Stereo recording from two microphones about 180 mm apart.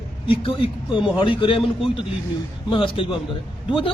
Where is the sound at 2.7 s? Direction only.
30° left (ahead or behind).